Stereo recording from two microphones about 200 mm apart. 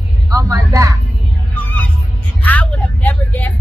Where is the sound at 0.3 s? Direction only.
15° right (ahead or behind).